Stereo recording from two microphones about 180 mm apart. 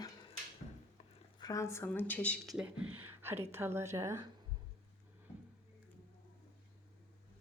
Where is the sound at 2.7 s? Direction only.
10° right (ahead or behind).